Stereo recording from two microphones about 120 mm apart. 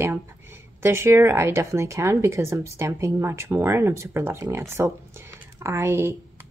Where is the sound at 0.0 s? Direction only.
20° right (ahead or behind).